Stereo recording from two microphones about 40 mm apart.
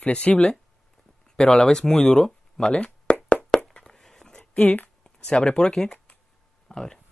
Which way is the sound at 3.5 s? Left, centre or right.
Centre.